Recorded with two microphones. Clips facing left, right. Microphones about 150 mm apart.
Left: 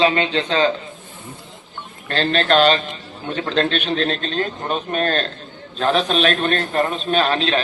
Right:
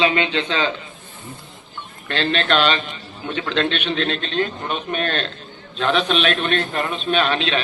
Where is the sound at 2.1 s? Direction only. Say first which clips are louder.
Left 3 dB; 40° left (ahead or behind).